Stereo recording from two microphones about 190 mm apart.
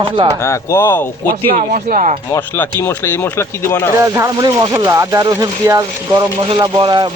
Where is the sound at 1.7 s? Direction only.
40° right (ahead or behind).